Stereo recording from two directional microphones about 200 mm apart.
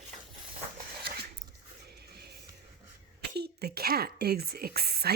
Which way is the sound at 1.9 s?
55° right (ahead or behind).